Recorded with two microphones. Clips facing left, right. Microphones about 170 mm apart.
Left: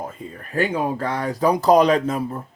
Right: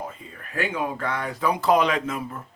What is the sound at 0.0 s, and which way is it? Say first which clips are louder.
Speech: left 4 dB; 40° left (ahead or behind).